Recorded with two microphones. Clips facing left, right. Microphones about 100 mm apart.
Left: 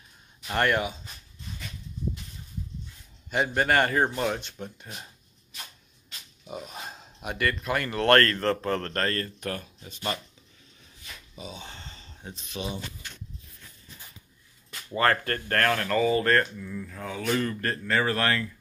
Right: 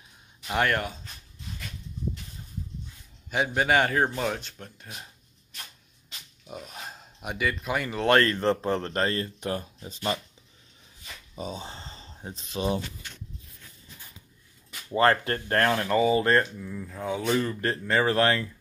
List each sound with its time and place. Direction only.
0.4 s speech: centre (ahead or behind)
3.3 s a man's voice: 5° right (ahead or behind)
6.4 s speech: 5° left (ahead or behind); by 9.9 s 30° right (ahead or behind)
11.3 s speech: 40° right (ahead or behind)
15.0 s speech: 20° right (ahead or behind)